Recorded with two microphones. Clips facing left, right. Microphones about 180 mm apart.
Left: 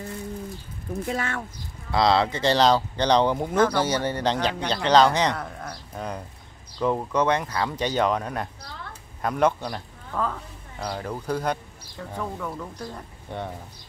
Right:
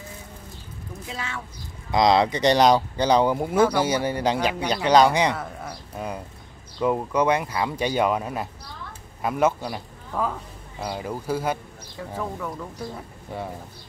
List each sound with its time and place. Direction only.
1.0 s speech: 55° left (ahead or behind)
1.9 s speech: 15° right (ahead or behind)